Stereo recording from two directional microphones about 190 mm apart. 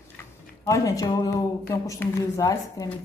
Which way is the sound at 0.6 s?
15° left (ahead or behind).